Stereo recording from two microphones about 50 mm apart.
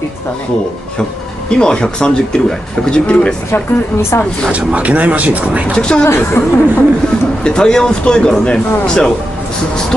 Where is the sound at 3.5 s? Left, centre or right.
Left.